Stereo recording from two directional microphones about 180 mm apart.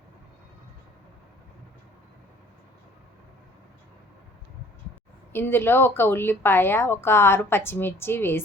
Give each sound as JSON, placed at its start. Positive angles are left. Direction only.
{"t": 5.3, "sound": "speech", "side_deg": 10}